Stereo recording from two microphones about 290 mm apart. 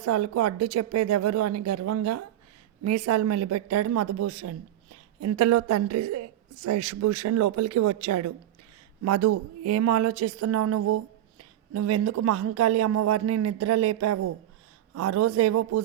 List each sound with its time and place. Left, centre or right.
0.0 s a woman's voice: right